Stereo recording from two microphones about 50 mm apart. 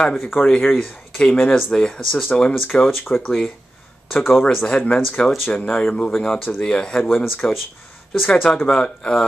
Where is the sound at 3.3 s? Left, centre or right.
Centre.